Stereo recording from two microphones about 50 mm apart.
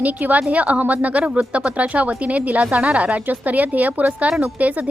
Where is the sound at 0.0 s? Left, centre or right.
Right.